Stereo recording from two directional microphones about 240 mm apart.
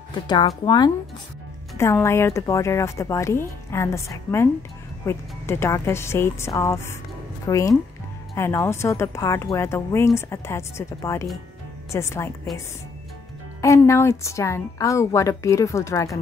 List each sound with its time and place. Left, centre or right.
0.1 s a woman's voice: centre
13.6 s a woman's voice: centre